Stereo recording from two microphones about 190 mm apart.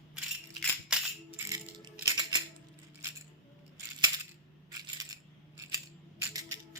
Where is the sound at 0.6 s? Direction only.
5° left (ahead or behind).